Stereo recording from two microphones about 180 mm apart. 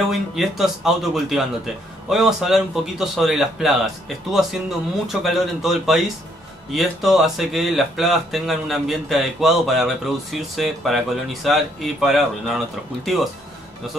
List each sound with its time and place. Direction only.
0.4 s speech: centre (ahead or behind)